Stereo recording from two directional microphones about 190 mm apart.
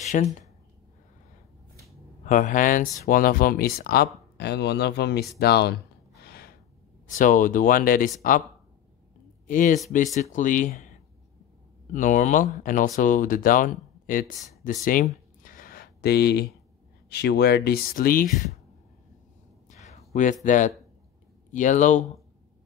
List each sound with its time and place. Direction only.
0.0 s a sound: 35° left (ahead or behind)
2.2 s speech: 40° left (ahead or behind); by 5.8 s 60° left (ahead or behind)
6.2 s gasp: 55° left (ahead or behind)
7.1 s speech: 45° left (ahead or behind)
9.5 s speech: 45° left (ahead or behind)
11.9 s speech: 40° left (ahead or behind)
15.4 s a sound: 45° left (ahead or behind)
17.1 s speech: 60° left (ahead or behind)
19.8 s a sound: 35° left (ahead or behind)
20.4 s speech: 40° left (ahead or behind)